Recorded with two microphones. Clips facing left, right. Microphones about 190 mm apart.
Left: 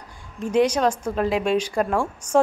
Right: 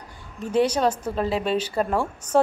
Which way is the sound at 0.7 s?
5° right (ahead or behind).